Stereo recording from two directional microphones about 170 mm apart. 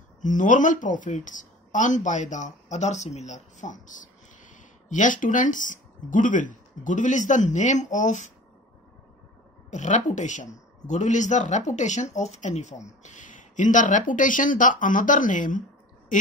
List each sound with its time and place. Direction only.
0.2 s speech: 50° left (ahead or behind)
9.7 s speech: 45° left (ahead or behind)